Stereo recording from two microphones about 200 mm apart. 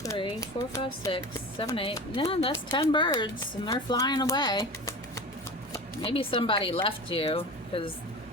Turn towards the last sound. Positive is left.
turn(degrees=25)  # may be behind; listen again after turning